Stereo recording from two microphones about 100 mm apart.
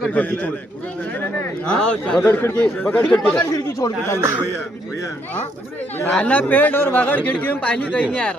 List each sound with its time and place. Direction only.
0.0 s a man's voice: 15° left (ahead or behind)
3.8 s speech: 30° left (ahead or behind)
6.1 s a man's voice: 10° left (ahead or behind)